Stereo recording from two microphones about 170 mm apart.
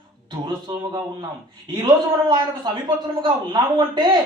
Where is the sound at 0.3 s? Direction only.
25° right (ahead or behind).